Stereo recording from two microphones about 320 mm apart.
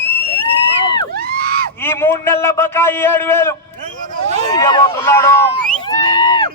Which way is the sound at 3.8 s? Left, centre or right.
Right.